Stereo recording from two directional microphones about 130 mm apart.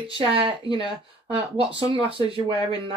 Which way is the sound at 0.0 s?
45° right (ahead or behind).